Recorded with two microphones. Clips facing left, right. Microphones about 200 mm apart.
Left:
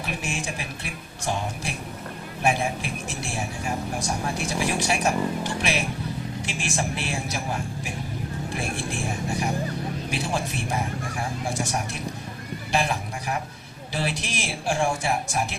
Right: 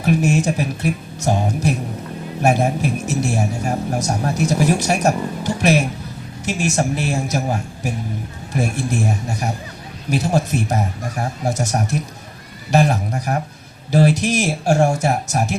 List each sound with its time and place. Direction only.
0.0 s speech: 45° right (ahead or behind)